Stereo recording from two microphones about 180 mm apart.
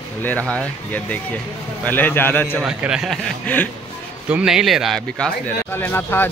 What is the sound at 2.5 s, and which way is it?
Speech, 5° right (ahead or behind).